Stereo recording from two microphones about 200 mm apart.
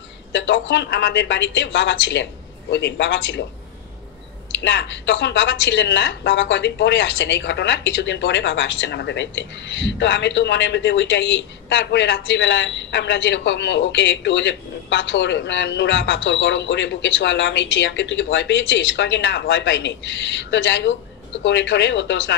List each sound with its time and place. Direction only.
0.3 s a woman's voice: 65° left (ahead or behind)
4.6 s a woman's voice: 65° left (ahead or behind)